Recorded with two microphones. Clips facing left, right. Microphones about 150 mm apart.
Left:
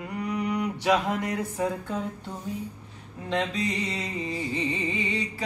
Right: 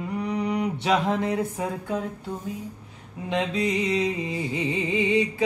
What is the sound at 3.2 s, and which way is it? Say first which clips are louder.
Mantra: right 2 dB; 20° right (ahead or behind).